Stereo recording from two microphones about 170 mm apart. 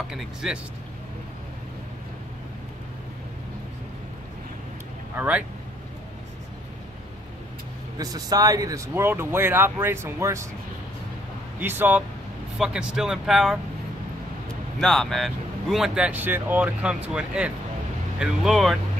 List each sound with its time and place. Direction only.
0.1 s speech: 5° right (ahead or behind)
5.1 s speech: 10° right (ahead or behind)
8.0 s speech: 20° right (ahead or behind)
11.6 s speech: 10° right (ahead or behind)
14.8 s speech: centre (ahead or behind)